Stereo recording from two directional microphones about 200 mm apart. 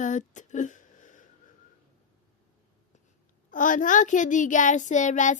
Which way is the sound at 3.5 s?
40° left (ahead or behind).